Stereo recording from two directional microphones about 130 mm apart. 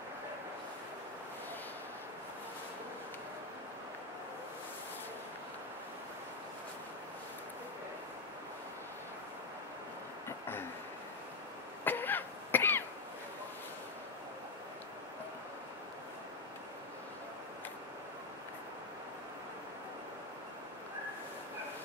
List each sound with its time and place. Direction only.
11.8 s cough: 15° left (ahead or behind)